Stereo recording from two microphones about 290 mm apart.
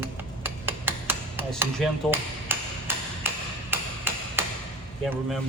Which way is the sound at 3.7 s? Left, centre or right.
Centre.